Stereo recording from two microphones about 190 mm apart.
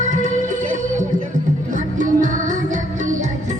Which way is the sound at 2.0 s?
40° right (ahead or behind).